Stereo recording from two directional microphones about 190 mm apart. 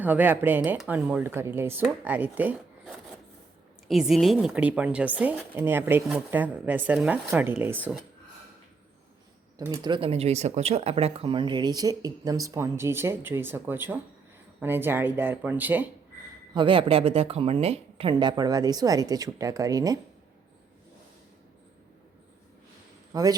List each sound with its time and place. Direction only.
0.0 s speech: 10° right (ahead or behind)
9.6 s speech: 20° right (ahead or behind)
16.6 s speech: 25° right (ahead or behind)
23.1 s speech: 20° right (ahead or behind)